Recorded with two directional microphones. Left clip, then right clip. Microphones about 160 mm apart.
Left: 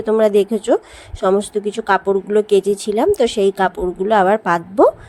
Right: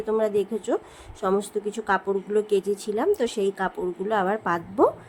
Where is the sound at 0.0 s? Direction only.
45° left (ahead or behind).